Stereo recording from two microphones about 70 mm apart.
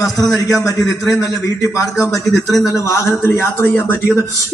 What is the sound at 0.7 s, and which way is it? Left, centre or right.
A man's voice, left.